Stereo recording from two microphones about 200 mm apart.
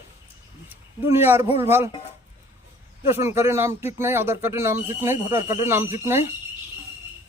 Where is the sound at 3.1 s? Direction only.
15° right (ahead or behind).